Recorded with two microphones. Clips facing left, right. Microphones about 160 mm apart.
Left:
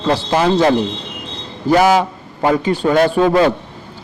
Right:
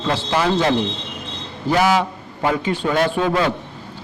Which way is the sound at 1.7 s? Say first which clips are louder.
Left 5 dB; 45° left (ahead or behind).